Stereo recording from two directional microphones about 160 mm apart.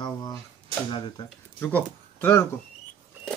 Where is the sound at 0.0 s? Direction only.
25° left (ahead or behind).